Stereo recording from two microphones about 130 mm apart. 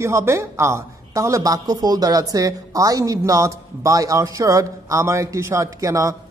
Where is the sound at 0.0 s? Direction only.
20° right (ahead or behind).